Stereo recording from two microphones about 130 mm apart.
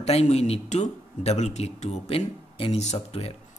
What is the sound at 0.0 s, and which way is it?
Speech, 55° left (ahead or behind).